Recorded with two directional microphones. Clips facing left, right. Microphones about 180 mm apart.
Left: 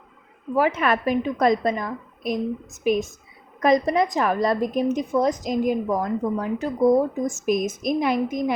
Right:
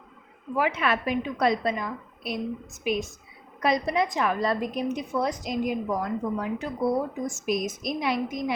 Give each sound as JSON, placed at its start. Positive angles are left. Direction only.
{"t": 0.5, "sound": "a woman's voice", "side_deg": 45}